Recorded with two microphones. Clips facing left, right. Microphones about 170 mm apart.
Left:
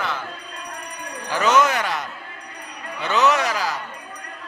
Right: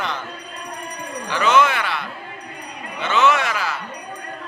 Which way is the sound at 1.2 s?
40° left (ahead or behind).